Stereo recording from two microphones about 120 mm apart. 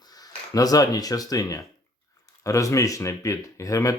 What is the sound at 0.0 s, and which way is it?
Speech, 30° left (ahead or behind).